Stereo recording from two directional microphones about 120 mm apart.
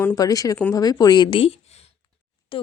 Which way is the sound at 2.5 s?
45° left (ahead or behind).